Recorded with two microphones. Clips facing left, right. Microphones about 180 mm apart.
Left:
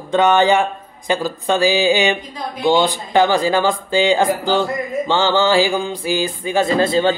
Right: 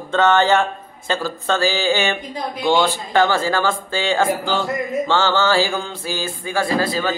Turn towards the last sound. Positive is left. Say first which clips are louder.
# left 5 dB
turn(degrees=25)  # may be behind; listen again after turning